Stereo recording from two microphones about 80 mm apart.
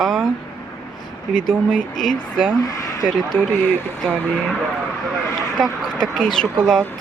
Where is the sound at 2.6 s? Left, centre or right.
Left.